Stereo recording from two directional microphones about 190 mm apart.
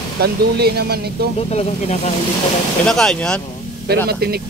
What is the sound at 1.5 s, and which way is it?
Speech, 35° left (ahead or behind).